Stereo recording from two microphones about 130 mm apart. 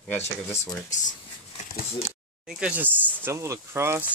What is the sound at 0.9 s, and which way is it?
Speech, 75° left (ahead or behind).